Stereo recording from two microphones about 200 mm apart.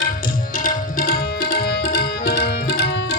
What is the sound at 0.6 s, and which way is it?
Tabla, 45° left (ahead or behind).